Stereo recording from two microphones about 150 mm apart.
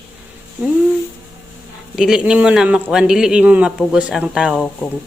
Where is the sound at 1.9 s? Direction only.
5° right (ahead or behind).